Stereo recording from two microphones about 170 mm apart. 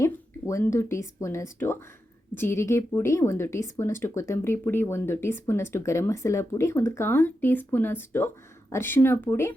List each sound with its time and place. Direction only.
0.0 s speech: 20° left (ahead or behind)